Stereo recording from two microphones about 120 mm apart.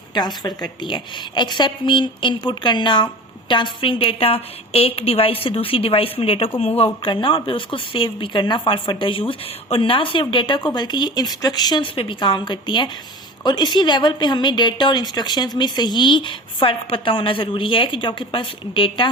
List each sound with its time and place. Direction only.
0.1 s a woman's voice: 35° left (ahead or behind)